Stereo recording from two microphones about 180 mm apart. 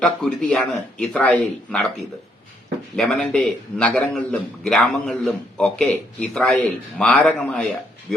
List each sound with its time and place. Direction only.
0.0 s a man's voice: 5° left (ahead or behind)
2.9 s a man's voice: 5° left (ahead or behind)